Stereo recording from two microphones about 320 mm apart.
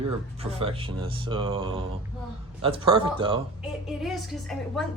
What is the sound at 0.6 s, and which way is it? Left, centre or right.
Speech, centre.